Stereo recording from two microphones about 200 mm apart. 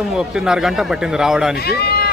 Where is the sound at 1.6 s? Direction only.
50° left (ahead or behind).